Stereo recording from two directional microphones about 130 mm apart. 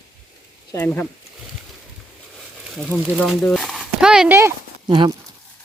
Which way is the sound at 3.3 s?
Centre (ahead or behind).